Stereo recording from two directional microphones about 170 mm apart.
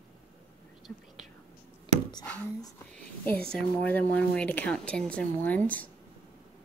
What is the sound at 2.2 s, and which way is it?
A woman's voice, 10° left (ahead or behind).